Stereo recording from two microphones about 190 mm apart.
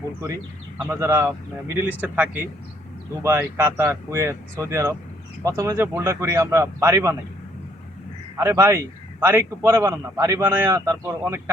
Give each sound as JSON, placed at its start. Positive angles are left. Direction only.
{"t": 0.9, "sound": "a man's voice", "side_deg": -15}
{"t": 8.4, "sound": "a man's voice", "side_deg": -15}